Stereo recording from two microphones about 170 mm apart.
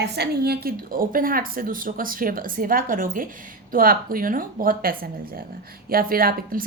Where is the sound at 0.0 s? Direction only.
70° right (ahead or behind).